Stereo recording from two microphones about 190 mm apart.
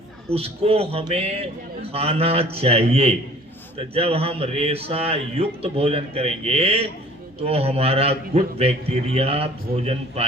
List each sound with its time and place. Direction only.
0.3 s speech: 30° right (ahead or behind)